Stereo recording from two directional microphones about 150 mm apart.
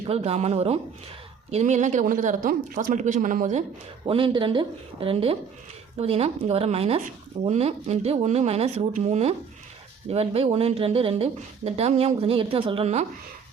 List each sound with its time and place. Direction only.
0.1 s speech: 45° right (ahead or behind)
4.0 s speech: 35° right (ahead or behind)